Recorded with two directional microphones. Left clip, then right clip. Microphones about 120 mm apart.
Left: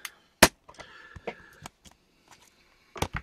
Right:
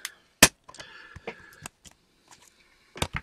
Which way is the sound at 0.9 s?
10° right (ahead or behind).